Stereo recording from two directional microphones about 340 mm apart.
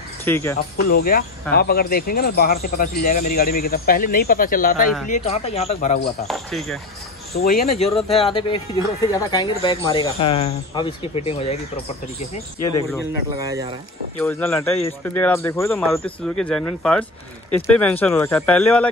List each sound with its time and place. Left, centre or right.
0.2 s speech: centre
0.7 s speech: left
6.2 s speech: centre
7.3 s speech: left
8.2 s speech: centre
13.4 s speech: centre
14.1 s speech: centre